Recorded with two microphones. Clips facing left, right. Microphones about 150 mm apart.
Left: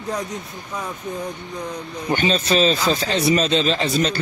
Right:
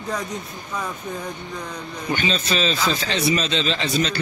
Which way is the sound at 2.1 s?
40° left (ahead or behind).